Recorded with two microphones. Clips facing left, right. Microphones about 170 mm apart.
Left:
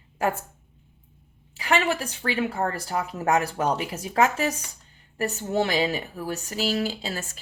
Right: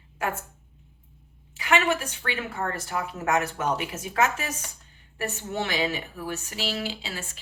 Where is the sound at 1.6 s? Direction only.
35° left (ahead or behind).